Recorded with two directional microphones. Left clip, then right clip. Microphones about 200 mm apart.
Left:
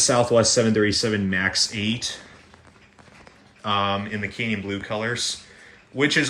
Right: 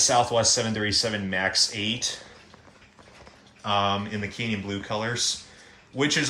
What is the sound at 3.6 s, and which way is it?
Speech, 10° right (ahead or behind).